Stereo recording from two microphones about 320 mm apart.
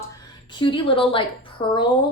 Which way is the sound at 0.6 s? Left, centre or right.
Centre.